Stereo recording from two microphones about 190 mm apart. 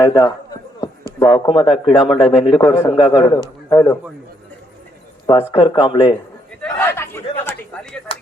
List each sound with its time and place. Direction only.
0.0 s a man's voice: 20° left (ahead or behind)
5.2 s speech: 15° left (ahead or behind)
5.5 s a man's voice: 30° left (ahead or behind)
6.6 s a sound: 10° left (ahead or behind)